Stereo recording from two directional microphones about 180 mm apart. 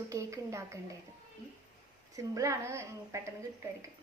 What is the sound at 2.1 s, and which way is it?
A woman's voice, 15° right (ahead or behind).